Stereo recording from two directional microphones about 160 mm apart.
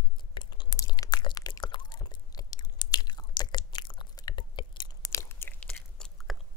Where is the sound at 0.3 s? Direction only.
30° left (ahead or behind).